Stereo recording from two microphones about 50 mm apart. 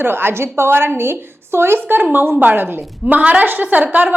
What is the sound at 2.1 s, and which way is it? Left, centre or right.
A woman's voice, right.